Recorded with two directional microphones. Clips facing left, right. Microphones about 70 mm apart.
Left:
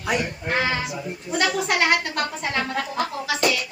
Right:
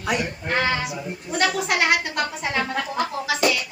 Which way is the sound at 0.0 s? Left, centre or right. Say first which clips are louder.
Even; centre.